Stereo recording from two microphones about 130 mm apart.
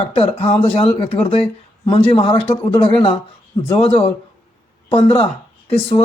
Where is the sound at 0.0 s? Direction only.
50° left (ahead or behind).